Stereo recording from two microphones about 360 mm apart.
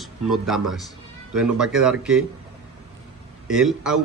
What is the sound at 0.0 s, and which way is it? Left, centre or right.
Speech, centre.